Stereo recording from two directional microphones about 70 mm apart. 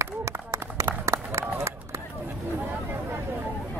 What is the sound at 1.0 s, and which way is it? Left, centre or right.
Run, right.